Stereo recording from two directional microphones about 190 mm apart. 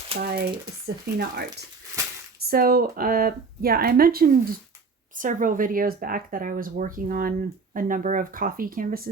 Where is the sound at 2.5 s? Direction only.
50° right (ahead or behind).